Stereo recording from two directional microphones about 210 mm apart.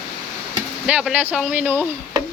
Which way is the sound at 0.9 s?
5° right (ahead or behind).